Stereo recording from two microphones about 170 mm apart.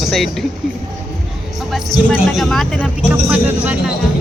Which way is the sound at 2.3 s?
Centre (ahead or behind).